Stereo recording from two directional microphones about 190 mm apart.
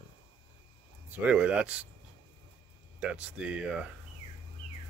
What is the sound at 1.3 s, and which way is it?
Speech, 5° right (ahead or behind).